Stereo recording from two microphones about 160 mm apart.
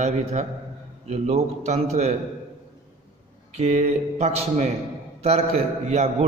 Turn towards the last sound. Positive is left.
turn(degrees=-40)  # may be behind; listen again after turning